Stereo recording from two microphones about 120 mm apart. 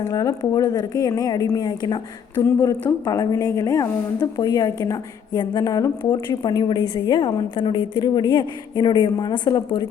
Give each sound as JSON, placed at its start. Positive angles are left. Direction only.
{"t": 0.0, "sound": "a woman's voice", "side_deg": 30}
{"t": 6.4, "sound": "a woman's voice", "side_deg": 40}